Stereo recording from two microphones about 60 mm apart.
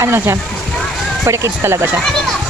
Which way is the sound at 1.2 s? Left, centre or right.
Right.